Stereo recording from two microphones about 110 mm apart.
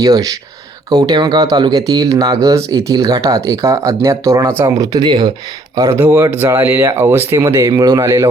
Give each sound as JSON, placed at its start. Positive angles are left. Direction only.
{"t": 0.0, "sound": "speech", "side_deg": -35}
{"t": 5.9, "sound": "speech", "side_deg": -20}